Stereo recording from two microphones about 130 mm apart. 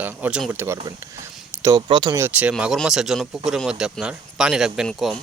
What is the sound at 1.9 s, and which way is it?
Speech, 40° right (ahead or behind).